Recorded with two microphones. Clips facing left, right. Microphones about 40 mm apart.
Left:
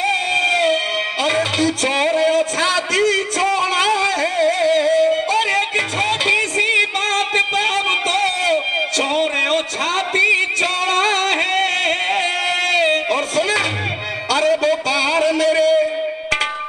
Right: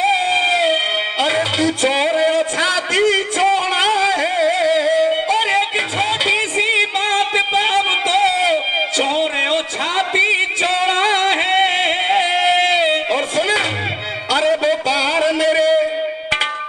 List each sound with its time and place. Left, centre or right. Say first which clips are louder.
0.0 s music: right 2 dB; centre
4.1 s music: right 1 dB; centre
14.3 s a sound: even; centre